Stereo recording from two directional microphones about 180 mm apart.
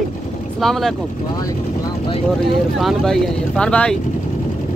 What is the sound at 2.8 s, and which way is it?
Speech, centre (ahead or behind).